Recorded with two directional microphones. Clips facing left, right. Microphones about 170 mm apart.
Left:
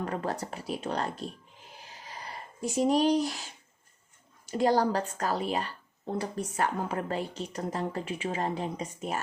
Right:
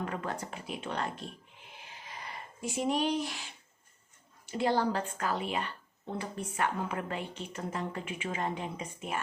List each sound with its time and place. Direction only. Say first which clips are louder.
0.0 s speech: left 4 dB; 35° left (ahead or behind)